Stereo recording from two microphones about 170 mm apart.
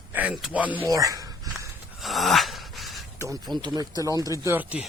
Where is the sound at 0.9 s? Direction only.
20° right (ahead or behind).